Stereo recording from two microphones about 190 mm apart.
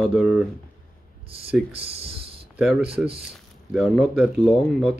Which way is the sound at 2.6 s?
Centre (ahead or behind).